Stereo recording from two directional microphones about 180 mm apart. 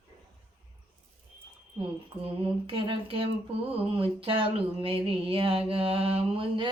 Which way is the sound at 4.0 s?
30° right (ahead or behind).